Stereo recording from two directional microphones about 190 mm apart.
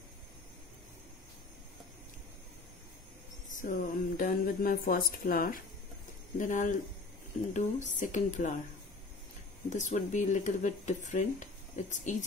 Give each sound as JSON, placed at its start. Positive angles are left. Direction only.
{"t": 3.4, "sound": "speech", "side_deg": 45}
{"t": 9.7, "sound": "speech", "side_deg": 40}